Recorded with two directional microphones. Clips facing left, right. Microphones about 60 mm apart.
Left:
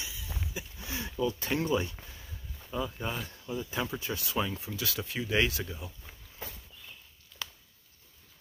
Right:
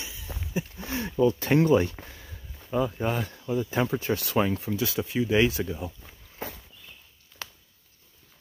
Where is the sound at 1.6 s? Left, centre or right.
Right.